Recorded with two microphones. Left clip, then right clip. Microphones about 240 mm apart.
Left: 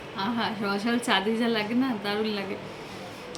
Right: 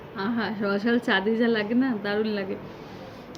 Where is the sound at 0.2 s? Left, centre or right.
Centre.